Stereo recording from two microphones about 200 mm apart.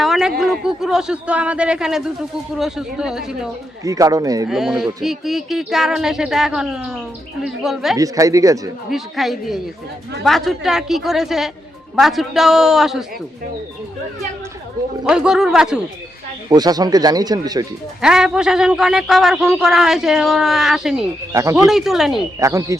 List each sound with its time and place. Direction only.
0.0 s a man's voice: centre (ahead or behind)
3.8 s speech: 15° right (ahead or behind)
4.4 s a man's voice: centre (ahead or behind)
7.9 s speech: 15° right (ahead or behind)
8.9 s a man's voice: centre (ahead or behind)
15.0 s a man's voice: 5° right (ahead or behind)
16.5 s speech: 20° right (ahead or behind)
18.0 s a man's voice: 5° right (ahead or behind)
21.3 s speech: 15° right (ahead or behind)
21.7 s a man's voice: centre (ahead or behind)
22.4 s speech: 15° right (ahead or behind)